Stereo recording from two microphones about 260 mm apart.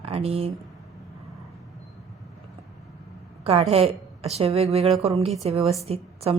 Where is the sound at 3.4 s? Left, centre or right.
Right.